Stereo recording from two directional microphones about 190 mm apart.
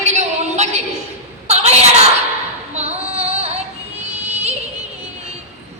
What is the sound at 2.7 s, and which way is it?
Female singing, 35° right (ahead or behind).